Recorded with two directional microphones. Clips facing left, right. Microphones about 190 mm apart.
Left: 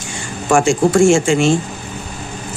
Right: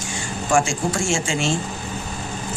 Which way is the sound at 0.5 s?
60° left (ahead or behind).